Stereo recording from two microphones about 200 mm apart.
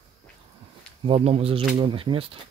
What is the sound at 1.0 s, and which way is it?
Speech, 30° right (ahead or behind).